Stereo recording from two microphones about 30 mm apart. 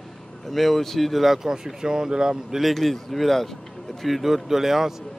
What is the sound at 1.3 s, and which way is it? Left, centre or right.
Speech, centre.